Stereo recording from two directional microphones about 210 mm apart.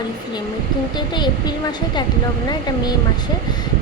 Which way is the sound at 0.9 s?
20° left (ahead or behind).